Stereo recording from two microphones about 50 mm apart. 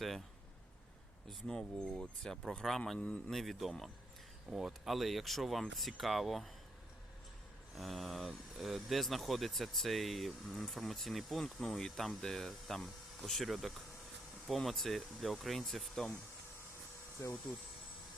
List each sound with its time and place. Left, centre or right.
1.3 s speech: centre
7.8 s speech: centre
17.2 s speech: left